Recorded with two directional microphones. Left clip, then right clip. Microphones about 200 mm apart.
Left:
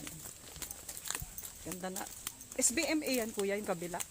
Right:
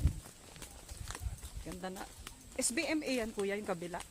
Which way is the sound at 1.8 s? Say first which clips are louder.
Left 2 dB; 25° left (ahead or behind).